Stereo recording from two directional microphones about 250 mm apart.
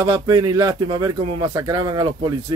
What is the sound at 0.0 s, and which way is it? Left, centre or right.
Speech, centre.